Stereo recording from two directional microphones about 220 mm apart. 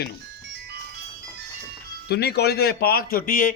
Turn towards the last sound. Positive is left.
turn(degrees=40)  # may be behind; listen again after turning